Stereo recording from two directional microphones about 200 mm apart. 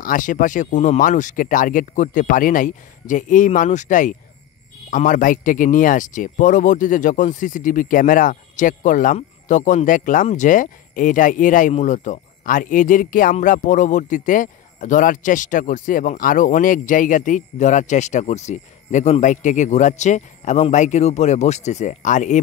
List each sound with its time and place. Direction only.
0.0 s speech: 40° left (ahead or behind)